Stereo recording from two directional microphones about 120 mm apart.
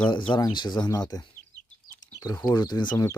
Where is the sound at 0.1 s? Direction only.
40° left (ahead or behind).